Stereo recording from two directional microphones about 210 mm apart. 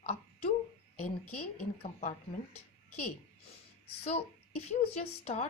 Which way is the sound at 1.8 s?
35° left (ahead or behind).